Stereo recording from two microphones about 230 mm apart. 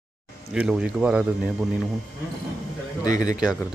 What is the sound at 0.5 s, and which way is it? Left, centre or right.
Speech, centre.